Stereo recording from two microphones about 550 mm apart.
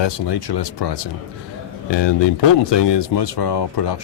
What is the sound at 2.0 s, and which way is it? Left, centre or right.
Speech, left.